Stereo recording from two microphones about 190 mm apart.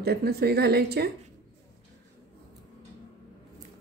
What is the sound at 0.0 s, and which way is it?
Speech, 55° right (ahead or behind).